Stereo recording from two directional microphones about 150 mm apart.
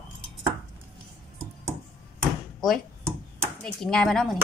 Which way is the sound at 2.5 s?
Centre (ahead or behind).